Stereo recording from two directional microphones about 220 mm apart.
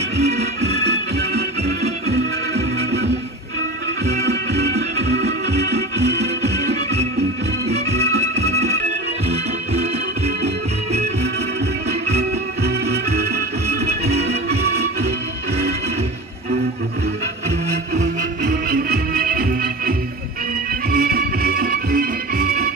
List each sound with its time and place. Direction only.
0.2 s music: 30° right (ahead or behind)
0.7 s music: 50° right (ahead or behind)
1.6 s music: 30° right (ahead or behind)
2.5 s music: 50° right (ahead or behind)
4.2 s music: 50° right (ahead or behind)
7.7 s music: 30° right (ahead or behind)
12.2 s music: 50° right (ahead or behind)
13.7 s music: 30° right (ahead or behind)
14.5 s music: 50° right (ahead or behind)
17.6 s music: 30° right (ahead or behind)
18.7 s music: 45° right (ahead or behind)